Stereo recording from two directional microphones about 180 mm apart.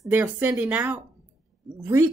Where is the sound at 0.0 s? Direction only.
10° right (ahead or behind).